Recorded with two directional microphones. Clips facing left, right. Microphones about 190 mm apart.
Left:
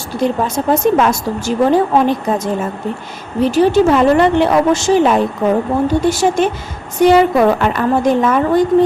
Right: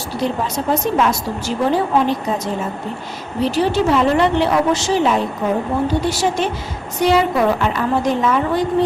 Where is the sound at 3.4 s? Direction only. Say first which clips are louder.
Left 6 dB; 50° left (ahead or behind).